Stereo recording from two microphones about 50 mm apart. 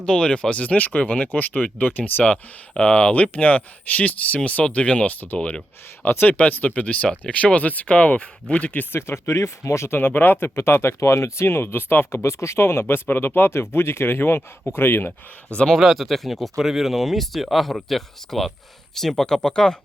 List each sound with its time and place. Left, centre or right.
0.0 s speech: centre; by 2.3 s left
2.3 s speech: left
6.1 s speech: left
6.3 s speech: left
8.9 s speech: left
10.0 s speech: left
11.0 s speech: left
12.2 s speech: left
15.5 s speech: centre
15.8 s speech: centre